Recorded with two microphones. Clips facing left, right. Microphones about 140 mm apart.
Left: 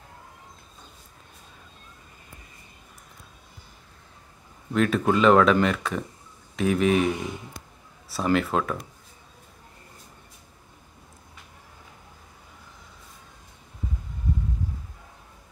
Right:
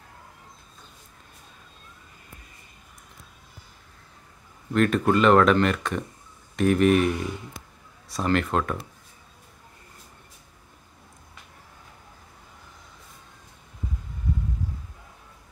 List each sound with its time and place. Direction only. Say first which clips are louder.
4.7 s speech: right 1 dB; centre (ahead or behind)